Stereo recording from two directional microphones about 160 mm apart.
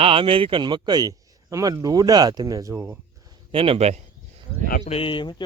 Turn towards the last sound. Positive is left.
turn(degrees=35)  # may be behind; listen again after turning